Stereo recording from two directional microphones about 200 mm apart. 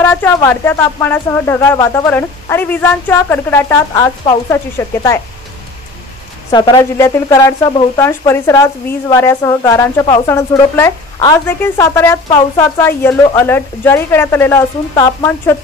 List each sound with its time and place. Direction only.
0.0 s a woman's voice: 10° left (ahead or behind)
6.5 s a woman's voice: 20° left (ahead or behind)